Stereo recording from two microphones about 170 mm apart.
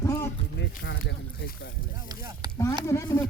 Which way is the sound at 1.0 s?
80° left.